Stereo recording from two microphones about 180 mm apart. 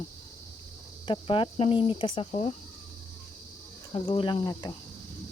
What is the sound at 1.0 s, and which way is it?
Speech, 30° left (ahead or behind).